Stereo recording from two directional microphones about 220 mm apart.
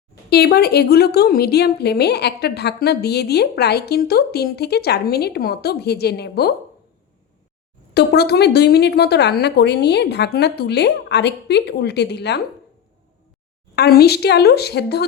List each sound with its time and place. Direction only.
0.3 s a woman's voice: 45° left (ahead or behind)
7.9 s a woman's voice: 50° left (ahead or behind)
13.7 s a woman's voice: 45° left (ahead or behind)